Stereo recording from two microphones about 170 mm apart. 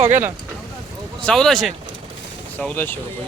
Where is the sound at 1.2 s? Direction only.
5° left (ahead or behind).